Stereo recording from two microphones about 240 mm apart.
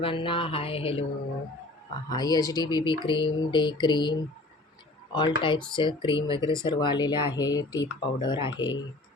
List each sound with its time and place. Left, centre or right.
0.0 s speech: left
2.0 s speech: centre
5.4 s speech: centre